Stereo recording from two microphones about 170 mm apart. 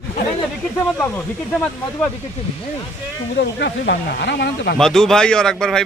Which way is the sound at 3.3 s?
75° left (ahead or behind).